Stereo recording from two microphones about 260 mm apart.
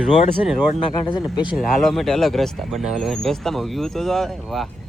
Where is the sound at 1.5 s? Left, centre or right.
Centre.